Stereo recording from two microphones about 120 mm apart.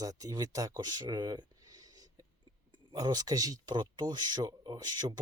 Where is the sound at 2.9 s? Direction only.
35° right (ahead or behind).